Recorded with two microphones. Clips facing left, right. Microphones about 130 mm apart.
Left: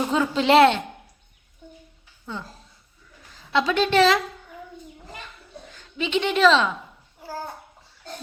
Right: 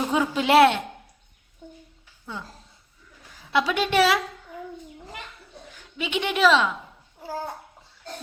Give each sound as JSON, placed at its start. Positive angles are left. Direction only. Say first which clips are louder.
{"t": 0.1, "sound": "speech", "louder": "left 1 dB", "side_deg": -10}
{"t": 3.3, "sound": "a woman's voice", "louder": "left 2 dB", "side_deg": -10}
{"t": 5.7, "sound": "a woman's voice", "louder": "left 4 dB", "side_deg": -10}
{"t": 7.2, "sound": "babbling", "louder": "right 2 dB", "side_deg": -20}